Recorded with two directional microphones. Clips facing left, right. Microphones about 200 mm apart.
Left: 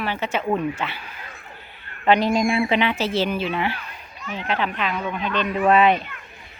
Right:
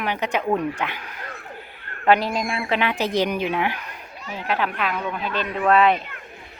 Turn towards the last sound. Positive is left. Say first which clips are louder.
# left 1 dB
turn(degrees=0)  # may be behind; listen again after turning